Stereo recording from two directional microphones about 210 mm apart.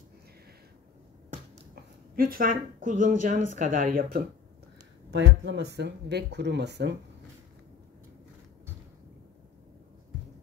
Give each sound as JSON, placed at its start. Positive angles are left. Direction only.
{"t": 2.1, "sound": "speech", "side_deg": -45}
{"t": 5.1, "sound": "speech", "side_deg": -60}